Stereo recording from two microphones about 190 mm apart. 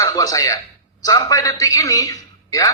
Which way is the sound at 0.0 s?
15° left (ahead or behind).